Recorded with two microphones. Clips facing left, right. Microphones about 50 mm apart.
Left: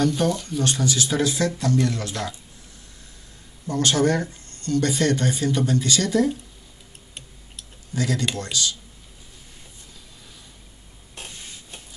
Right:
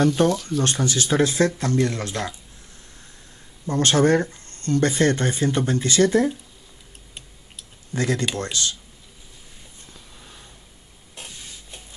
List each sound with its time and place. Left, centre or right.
0.0 s speech: right
0.3 s speech: centre
0.6 s speech: right
3.6 s speech: right
7.9 s speech: right